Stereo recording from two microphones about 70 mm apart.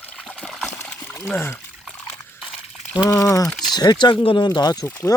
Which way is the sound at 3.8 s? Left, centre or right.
Left.